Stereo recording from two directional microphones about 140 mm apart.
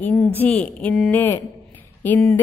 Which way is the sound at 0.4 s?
10° left (ahead or behind).